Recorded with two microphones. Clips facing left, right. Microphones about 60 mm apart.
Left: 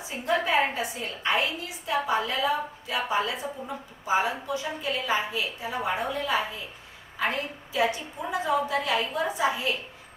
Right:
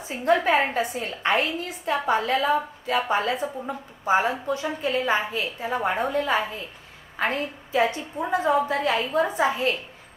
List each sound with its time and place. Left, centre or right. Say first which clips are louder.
0.0 s a woman's voice: right 5 dB; right